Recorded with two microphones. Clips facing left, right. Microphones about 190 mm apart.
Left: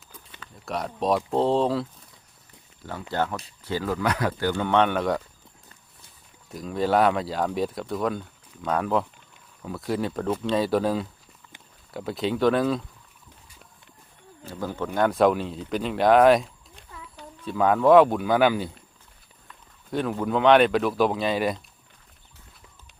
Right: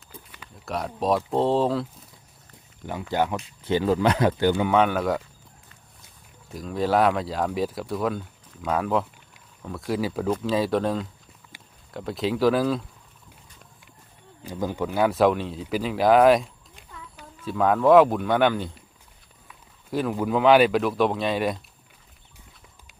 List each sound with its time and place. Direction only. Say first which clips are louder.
0.5 s speech: even; centre (ahead or behind)
3.1 s speech: right 2 dB; 15° right (ahead or behind)
6.5 s speech: even; centre (ahead or behind)
14.4 s speech: right 3 dB; 15° right (ahead or behind); by 18.7 s 5° left (ahead or behind)
19.9 s speech: right 1 dB; 5° right (ahead or behind)